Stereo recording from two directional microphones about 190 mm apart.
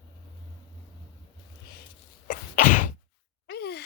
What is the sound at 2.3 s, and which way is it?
Sneeze, 45° left (ahead or behind).